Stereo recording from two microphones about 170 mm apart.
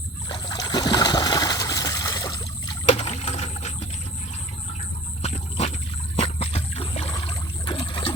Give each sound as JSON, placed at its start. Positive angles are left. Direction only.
{"t": 0.3, "sound": "trickle", "side_deg": 25}
{"t": 2.9, "sound": "rowboat", "side_deg": 40}
{"t": 5.2, "sound": "a sound", "side_deg": 40}